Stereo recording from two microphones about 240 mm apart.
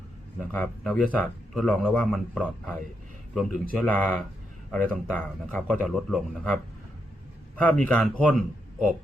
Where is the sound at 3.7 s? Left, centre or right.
Centre.